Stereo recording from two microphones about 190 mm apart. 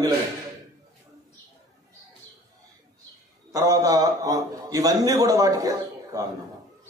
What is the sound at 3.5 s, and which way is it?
A man's voice, 20° right (ahead or behind).